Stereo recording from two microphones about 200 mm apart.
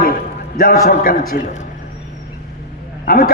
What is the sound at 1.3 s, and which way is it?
Speech, 40° left (ahead or behind).